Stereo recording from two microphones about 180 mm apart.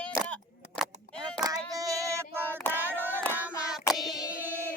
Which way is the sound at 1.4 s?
20° right (ahead or behind).